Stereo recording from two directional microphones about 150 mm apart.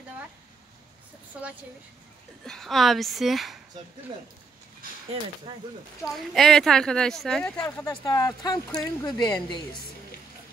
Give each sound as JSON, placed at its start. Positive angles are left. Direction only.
{"t": 1.3, "sound": "speech", "side_deg": -5}
{"t": 5.5, "sound": "speech", "side_deg": -30}
{"t": 6.0, "sound": "speech", "side_deg": 0}
{"t": 7.9, "sound": "speech", "side_deg": 25}